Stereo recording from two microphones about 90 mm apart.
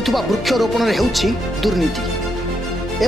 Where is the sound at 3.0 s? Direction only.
Centre (ahead or behind).